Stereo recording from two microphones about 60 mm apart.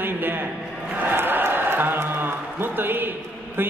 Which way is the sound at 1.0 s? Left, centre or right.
Right.